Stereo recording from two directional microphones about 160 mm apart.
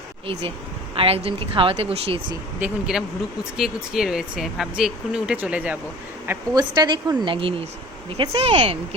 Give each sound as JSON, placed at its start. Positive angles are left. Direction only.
{"t": 0.9, "sound": "speech", "side_deg": -35}
{"t": 2.6, "sound": "speech", "side_deg": -10}
{"t": 6.5, "sound": "a woman's voice", "side_deg": -25}